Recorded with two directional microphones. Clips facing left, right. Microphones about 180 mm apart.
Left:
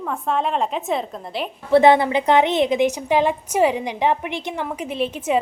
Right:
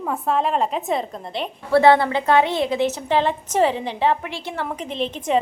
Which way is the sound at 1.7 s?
20° left (ahead or behind).